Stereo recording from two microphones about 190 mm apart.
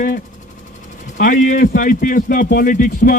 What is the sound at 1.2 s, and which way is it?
Speech, 40° left (ahead or behind).